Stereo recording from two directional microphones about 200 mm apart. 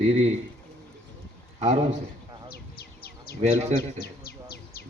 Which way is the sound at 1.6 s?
30° right (ahead or behind).